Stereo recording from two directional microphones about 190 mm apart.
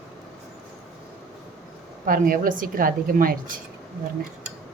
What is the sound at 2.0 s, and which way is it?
A woman's voice, 45° right (ahead or behind).